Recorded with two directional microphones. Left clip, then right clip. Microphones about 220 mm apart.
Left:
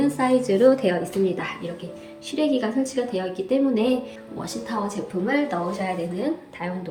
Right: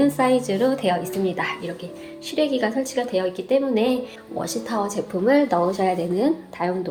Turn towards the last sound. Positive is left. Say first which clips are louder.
# right 5 dB
turn(degrees=-25)  # may be behind; listen again after turning